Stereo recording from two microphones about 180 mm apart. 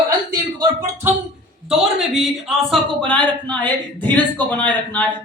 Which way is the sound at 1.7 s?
Centre (ahead or behind).